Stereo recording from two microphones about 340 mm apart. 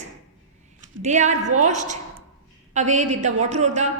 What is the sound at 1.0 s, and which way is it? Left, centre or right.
A woman's voice, right.